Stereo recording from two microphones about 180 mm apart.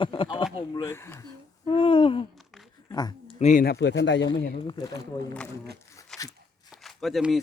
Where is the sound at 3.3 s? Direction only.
40° left (ahead or behind).